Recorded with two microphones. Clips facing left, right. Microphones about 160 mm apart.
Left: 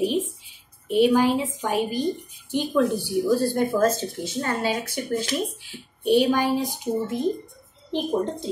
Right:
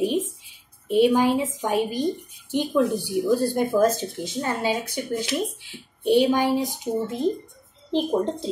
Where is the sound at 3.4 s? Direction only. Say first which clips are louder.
Right 1 dB; 15° right (ahead or behind).